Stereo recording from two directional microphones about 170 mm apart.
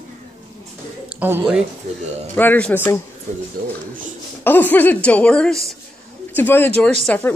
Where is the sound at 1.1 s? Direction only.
10° right (ahead or behind).